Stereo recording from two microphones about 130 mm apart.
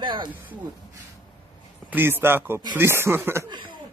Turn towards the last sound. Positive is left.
turn(degrees=-40)  # may be behind; listen again after turning